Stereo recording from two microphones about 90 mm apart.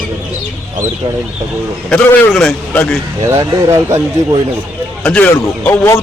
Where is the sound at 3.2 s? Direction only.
35° right (ahead or behind).